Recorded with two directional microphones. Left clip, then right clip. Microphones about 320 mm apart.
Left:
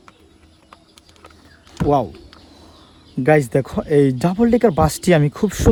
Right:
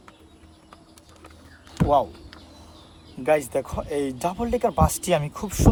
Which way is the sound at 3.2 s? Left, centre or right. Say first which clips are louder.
Left 6 dB; left.